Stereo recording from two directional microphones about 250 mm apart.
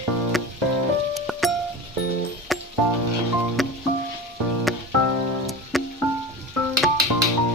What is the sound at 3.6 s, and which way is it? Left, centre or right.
Music, centre.